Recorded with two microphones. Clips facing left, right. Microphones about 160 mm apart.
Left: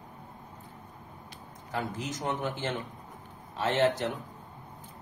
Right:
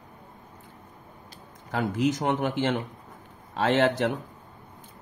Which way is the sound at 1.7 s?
80° right.